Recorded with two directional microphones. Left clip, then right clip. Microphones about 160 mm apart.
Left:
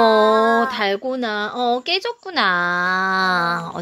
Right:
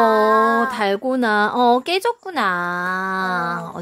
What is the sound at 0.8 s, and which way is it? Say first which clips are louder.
Speech: right 2 dB; 20° right (ahead or behind).